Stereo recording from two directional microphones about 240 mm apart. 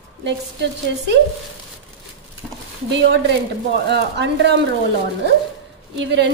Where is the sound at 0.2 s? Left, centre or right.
Right.